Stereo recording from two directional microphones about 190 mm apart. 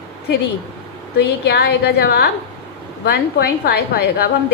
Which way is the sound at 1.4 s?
60° left (ahead or behind).